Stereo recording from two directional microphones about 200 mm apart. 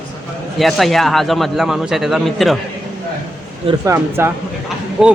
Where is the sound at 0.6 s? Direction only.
Centre (ahead or behind).